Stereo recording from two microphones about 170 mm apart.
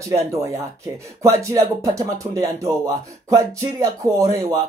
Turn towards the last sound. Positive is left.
turn(degrees=-20)  # may be behind; listen again after turning